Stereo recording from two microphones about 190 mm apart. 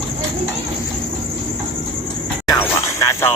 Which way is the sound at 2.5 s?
15° left (ahead or behind).